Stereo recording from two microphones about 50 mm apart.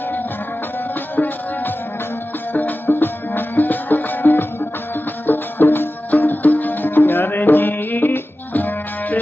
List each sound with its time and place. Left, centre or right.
1.1 s music: left